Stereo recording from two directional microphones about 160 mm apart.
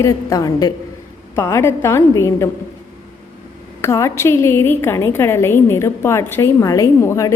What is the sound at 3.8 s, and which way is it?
A woman's voice, 15° left (ahead or behind).